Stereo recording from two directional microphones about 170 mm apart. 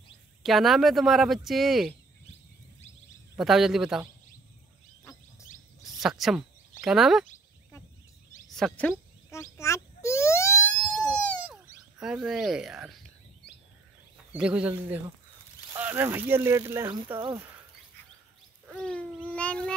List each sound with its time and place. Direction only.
0.4 s speech: centre (ahead or behind)
3.3 s speech: centre (ahead or behind)
5.9 s speech: centre (ahead or behind)
8.5 s a sound: centre (ahead or behind)
11.5 s speech: 5° right (ahead or behind)
14.3 s speech: 5° right (ahead or behind)
18.7 s a sound: 5° left (ahead or behind)